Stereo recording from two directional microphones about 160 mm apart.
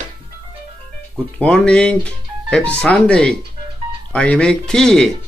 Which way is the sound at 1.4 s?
5° left (ahead or behind).